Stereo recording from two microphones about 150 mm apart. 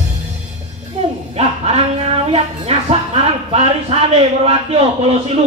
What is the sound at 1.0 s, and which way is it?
Music, 45° right (ahead or behind).